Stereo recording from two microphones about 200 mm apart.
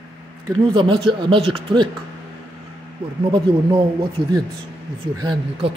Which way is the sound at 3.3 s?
25° right (ahead or behind).